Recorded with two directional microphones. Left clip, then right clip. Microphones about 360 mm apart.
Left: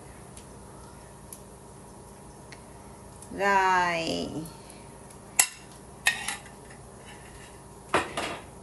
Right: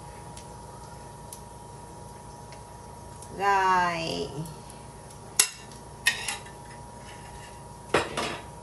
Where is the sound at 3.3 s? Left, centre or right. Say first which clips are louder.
Even; left.